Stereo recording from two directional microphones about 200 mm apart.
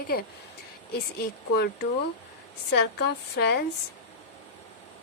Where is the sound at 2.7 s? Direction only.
55° left (ahead or behind).